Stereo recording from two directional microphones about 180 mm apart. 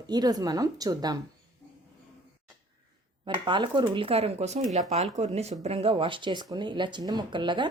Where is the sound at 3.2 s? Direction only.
25° right (ahead or behind).